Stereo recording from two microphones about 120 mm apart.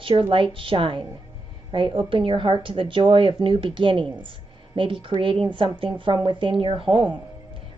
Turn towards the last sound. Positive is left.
turn(degrees=-45)  # may be behind; listen again after turning